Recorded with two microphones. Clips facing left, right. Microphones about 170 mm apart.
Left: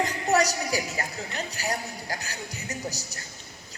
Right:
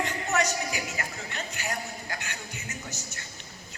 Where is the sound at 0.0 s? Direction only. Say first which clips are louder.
Left 4 dB; 35° left (ahead or behind).